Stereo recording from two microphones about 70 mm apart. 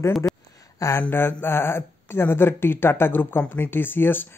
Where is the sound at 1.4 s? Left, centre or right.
Left.